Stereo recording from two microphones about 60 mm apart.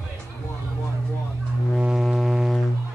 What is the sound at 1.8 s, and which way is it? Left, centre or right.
Music, centre.